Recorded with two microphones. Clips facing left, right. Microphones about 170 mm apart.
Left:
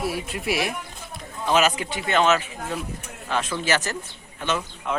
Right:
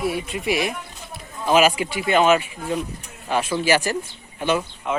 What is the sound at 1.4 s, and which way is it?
A man's voice, 10° right (ahead or behind).